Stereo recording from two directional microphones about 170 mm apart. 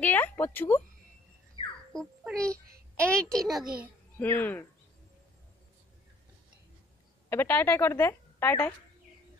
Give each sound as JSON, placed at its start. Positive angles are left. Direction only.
{"t": 0.0, "sound": "speech", "side_deg": 10}
{"t": 1.6, "sound": "a sound", "side_deg": -25}
{"t": 2.0, "sound": "a child's voice", "side_deg": 5}
{"t": 7.2, "sound": "a woman's voice", "side_deg": 10}